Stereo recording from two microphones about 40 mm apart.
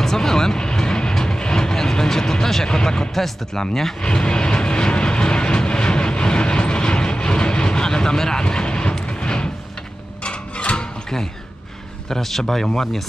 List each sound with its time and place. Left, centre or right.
0.0 s vehicle: centre
3.2 s speech: centre
4.0 s vehicle: left
10.2 s a sound: left
12.1 s speech: centre